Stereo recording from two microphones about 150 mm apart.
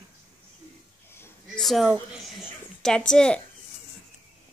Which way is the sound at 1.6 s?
Centre (ahead or behind).